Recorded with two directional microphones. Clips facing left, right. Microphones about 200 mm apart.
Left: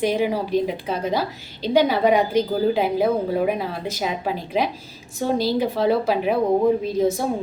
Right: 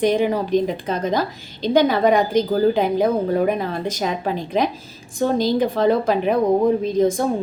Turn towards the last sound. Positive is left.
turn(degrees=5)  # may be behind; listen again after turning